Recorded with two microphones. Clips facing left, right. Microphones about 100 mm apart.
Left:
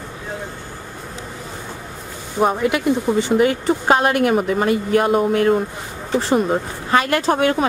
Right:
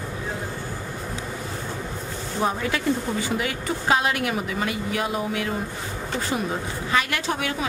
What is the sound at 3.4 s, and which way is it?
A woman's voice, 40° left (ahead or behind).